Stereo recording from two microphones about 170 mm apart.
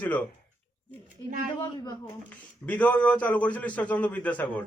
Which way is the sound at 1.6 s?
25° left (ahead or behind).